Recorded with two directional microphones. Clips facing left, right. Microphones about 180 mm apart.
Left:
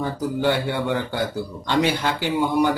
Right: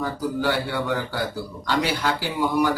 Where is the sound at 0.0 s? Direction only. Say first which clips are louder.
Left 2 dB; 25° left (ahead or behind).